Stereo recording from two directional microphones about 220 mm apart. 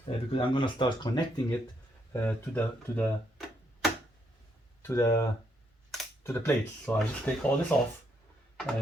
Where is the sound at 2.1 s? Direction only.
5° left (ahead or behind).